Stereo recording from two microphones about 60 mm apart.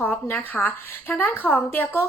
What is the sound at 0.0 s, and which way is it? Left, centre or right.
A woman's voice, left.